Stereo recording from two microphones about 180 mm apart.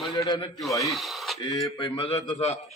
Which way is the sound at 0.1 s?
20° left (ahead or behind).